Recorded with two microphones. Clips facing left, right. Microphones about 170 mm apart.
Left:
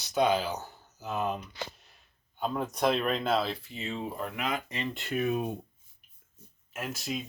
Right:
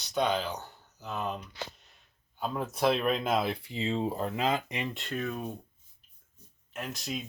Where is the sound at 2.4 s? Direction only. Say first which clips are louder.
Even; centre (ahead or behind).